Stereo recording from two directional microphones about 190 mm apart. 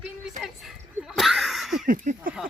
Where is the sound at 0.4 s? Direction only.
Centre (ahead or behind).